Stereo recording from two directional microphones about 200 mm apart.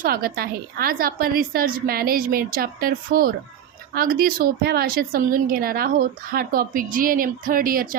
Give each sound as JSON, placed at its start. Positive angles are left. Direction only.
{"t": 0.0, "sound": "a woman's voice", "side_deg": -50}